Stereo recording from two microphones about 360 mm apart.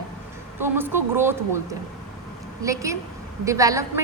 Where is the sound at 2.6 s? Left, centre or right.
Centre.